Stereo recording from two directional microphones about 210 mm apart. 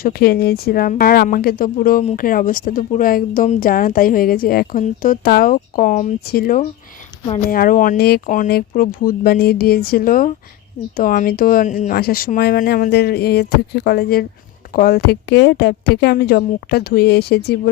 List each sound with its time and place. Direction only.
0.0 s speech: 45° left (ahead or behind)